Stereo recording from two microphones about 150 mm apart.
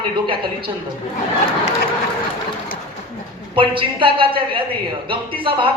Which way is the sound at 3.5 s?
35° right (ahead or behind).